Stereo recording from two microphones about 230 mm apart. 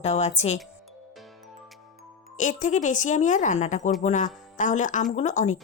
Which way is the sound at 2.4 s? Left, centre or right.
Left.